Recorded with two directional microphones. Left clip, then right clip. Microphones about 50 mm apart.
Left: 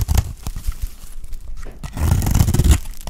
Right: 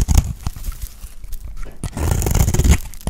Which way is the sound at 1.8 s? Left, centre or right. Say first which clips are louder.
Right 2 dB; centre.